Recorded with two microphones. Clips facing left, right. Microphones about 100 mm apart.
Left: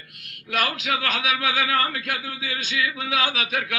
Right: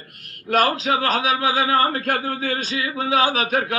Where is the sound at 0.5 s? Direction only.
40° right (ahead or behind).